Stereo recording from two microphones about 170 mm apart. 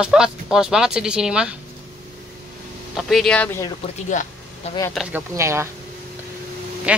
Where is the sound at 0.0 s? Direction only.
5° right (ahead or behind).